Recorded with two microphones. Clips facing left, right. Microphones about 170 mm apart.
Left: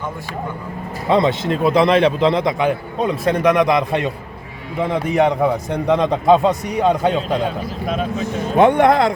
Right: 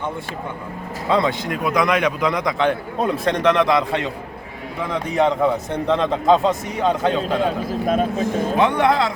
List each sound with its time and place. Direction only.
1.0 s a man's voice: 20° left (ahead or behind)
2.6 s a man's voice: 5° left (ahead or behind)
7.7 s speech: 50° right (ahead or behind)
8.5 s speech: 50° left (ahead or behind)